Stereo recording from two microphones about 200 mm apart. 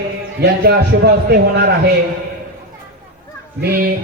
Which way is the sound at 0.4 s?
55° right (ahead or behind).